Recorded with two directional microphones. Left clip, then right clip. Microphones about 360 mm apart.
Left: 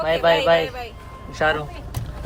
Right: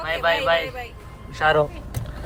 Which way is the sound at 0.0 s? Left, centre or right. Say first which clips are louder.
Left 4 dB; centre.